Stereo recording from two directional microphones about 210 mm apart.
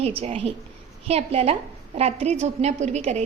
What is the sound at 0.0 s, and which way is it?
A woman's voice, 30° right (ahead or behind).